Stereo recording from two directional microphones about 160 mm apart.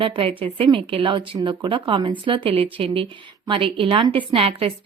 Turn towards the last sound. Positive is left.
turn(degrees=-35)  # may be behind; listen again after turning